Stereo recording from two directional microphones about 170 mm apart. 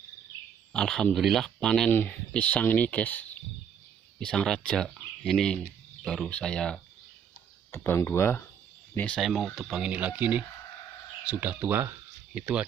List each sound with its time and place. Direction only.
0.7 s speech: 5° left (ahead or behind)